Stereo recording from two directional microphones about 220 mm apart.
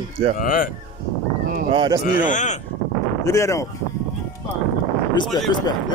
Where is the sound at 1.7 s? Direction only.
20° right (ahead or behind).